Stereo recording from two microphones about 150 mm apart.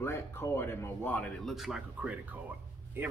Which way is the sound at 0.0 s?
15° left (ahead or behind).